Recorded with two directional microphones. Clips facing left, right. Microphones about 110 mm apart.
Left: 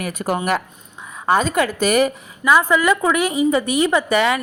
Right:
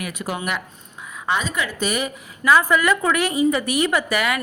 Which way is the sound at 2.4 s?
20° left (ahead or behind).